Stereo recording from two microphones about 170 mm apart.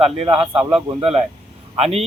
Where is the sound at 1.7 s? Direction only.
35° right (ahead or behind).